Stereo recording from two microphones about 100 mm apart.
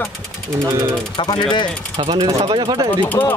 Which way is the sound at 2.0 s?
50° right (ahead or behind).